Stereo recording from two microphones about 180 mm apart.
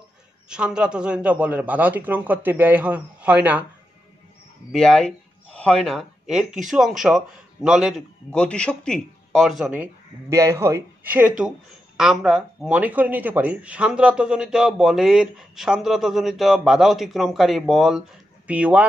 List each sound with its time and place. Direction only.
0.5 s a man's voice: 5° right (ahead or behind)
4.7 s a man's voice: 5° left (ahead or behind)
10.3 s a man's voice: 15° right (ahead or behind)